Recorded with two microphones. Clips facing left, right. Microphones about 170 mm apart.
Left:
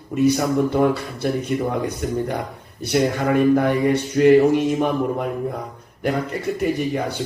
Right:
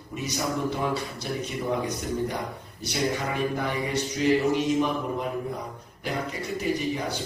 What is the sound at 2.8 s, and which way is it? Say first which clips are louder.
A man's voice: left 9 dB; 55° left (ahead or behind).